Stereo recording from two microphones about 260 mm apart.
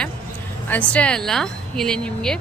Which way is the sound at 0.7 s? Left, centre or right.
Centre.